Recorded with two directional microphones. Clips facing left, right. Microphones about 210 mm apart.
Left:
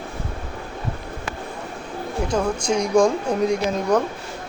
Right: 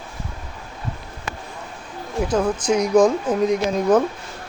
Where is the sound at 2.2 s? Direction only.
5° right (ahead or behind).